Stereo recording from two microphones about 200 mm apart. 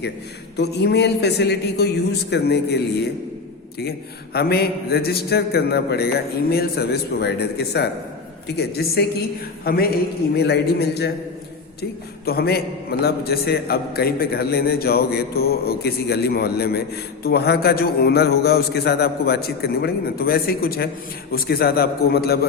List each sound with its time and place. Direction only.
0.5 s a man's voice: 55° left (ahead or behind)